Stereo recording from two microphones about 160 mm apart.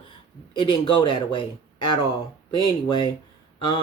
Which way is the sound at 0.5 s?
30° left (ahead or behind).